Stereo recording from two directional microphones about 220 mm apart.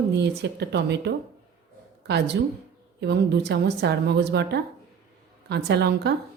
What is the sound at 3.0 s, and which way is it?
A woman's voice, 50° right (ahead or behind).